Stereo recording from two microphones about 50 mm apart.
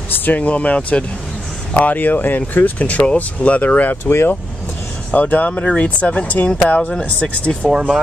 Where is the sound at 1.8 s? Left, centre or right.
Left.